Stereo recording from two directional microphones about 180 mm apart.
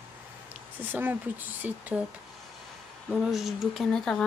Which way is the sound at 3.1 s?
Centre (ahead or behind).